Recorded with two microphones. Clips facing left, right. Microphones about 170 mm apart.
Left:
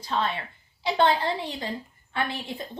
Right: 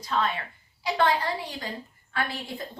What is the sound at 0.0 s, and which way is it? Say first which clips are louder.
A woman's voice: even; 30° left (ahead or behind).